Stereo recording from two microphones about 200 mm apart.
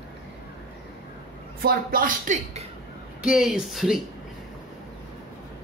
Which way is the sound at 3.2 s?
5° right (ahead or behind).